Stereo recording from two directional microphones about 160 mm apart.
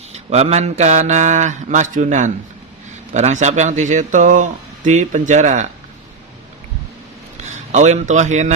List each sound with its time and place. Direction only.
0.1 s speech: 45° right (ahead or behind)
7.7 s speech: 45° right (ahead or behind)